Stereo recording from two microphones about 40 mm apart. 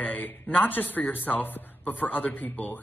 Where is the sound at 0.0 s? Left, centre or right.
Left.